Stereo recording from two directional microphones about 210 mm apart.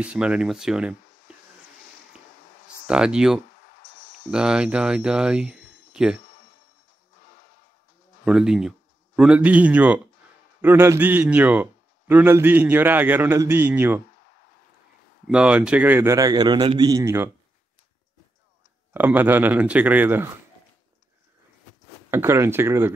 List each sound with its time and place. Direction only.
0.0 s speech: 5° right (ahead or behind)
2.9 s speech: 5° right (ahead or behind)
3.6 s music: 40° left (ahead or behind)
4.3 s speech: 5° right (ahead or behind)
8.3 s a man's voice: 5° right (ahead or behind)
15.2 s a man's voice: 5° right (ahead or behind)
18.9 s a man's voice: 10° right (ahead or behind)
22.1 s a man's voice: 10° right (ahead or behind)